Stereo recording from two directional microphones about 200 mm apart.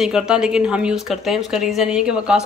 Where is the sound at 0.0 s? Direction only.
5° right (ahead or behind).